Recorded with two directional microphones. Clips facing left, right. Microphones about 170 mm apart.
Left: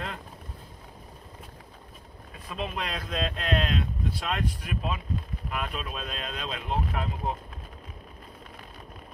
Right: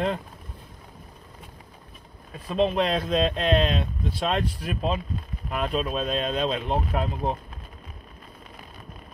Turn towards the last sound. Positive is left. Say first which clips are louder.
# right 4 dB
turn(degrees=-25)  # may be behind; listen again after turning